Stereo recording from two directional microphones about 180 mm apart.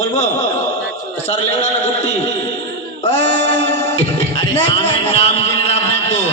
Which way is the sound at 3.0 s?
35° left (ahead or behind).